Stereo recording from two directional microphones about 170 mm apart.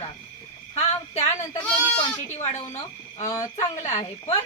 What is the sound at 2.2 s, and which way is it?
A woman's voice, 40° left (ahead or behind).